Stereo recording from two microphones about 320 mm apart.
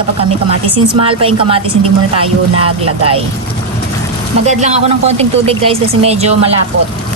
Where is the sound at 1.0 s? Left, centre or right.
Centre.